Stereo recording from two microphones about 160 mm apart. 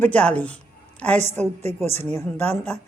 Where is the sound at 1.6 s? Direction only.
40° right (ahead or behind).